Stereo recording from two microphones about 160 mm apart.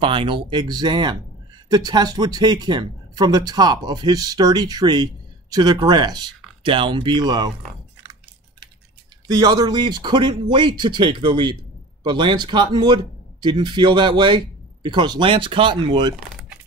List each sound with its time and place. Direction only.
0.0 s speech: 30° right (ahead or behind)
9.3 s speech: 25° right (ahead or behind)